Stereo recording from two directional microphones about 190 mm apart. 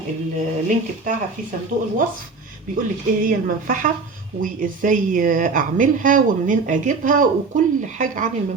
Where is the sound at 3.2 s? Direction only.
45° right (ahead or behind).